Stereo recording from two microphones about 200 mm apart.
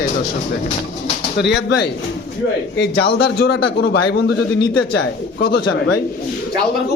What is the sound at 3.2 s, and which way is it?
Speech, 55° left (ahead or behind).